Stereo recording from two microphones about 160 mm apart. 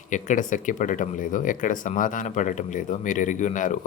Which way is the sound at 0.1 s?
50° left (ahead or behind).